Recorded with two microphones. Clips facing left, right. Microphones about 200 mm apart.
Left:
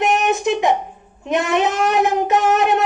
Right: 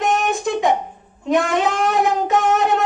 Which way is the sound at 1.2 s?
20° left (ahead or behind).